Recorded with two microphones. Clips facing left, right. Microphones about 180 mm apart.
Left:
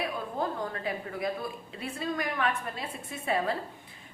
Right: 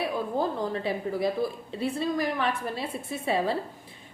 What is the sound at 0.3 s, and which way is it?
A woman's voice, 30° right (ahead or behind).